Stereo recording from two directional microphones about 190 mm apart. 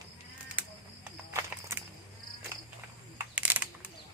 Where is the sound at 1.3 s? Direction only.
15° right (ahead or behind).